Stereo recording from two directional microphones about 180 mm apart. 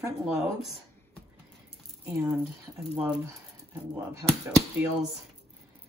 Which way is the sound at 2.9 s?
10° right (ahead or behind).